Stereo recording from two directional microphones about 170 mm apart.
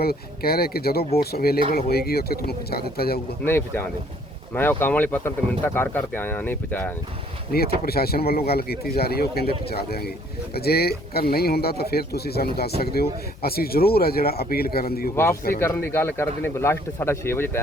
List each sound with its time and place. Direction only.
0.0 s speech: 65° left (ahead or behind)
3.4 s speech: 15° left (ahead or behind)
7.5 s speech: 65° left (ahead or behind)
15.1 s speech: 15° left (ahead or behind)